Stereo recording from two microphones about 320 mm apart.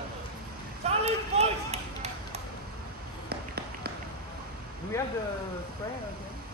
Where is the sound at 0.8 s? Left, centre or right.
Centre.